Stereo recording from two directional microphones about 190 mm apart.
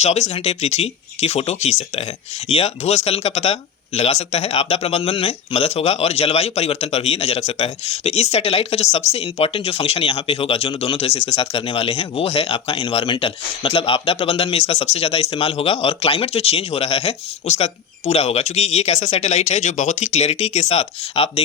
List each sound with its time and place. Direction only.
0.0 s speech: 35° left (ahead or behind)